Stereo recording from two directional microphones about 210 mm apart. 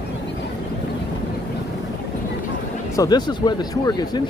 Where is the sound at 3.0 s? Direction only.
20° left (ahead or behind).